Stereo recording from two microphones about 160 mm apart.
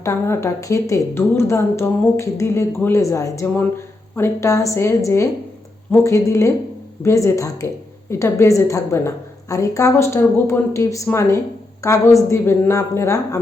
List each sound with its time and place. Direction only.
0.0 s speech: 15° left (ahead or behind)